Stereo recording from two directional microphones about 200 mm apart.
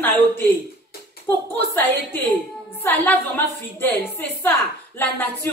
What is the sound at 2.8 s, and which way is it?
Speech, 10° left (ahead or behind).